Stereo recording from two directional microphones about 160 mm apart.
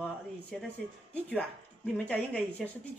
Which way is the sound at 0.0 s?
Centre (ahead or behind).